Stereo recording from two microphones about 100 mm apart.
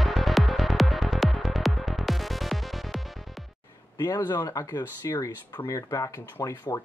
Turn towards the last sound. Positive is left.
turn(degrees=35)  # may be behind; listen again after turning